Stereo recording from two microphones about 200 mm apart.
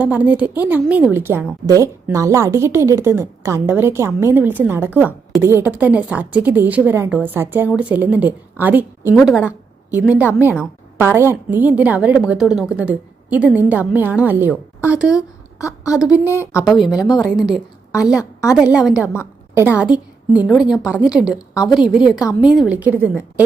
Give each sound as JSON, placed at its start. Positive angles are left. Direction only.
{"t": 0.0, "sound": "a woman's voice", "side_deg": -10}
{"t": 15.5, "sound": "a woman's voice", "side_deg": 15}
{"t": 16.6, "sound": "a woman's voice", "side_deg": 0}
{"t": 18.0, "sound": "a woman's voice", "side_deg": -5}